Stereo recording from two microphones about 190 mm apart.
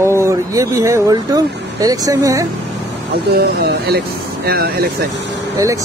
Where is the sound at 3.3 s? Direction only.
55° right (ahead or behind).